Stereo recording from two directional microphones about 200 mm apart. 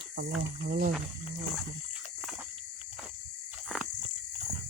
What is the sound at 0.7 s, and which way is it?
Speech, 45° right (ahead or behind).